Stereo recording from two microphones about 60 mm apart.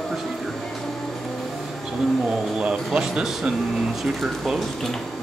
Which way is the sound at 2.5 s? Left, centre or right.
Centre.